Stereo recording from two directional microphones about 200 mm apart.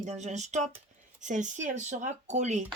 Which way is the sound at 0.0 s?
35° right (ahead or behind).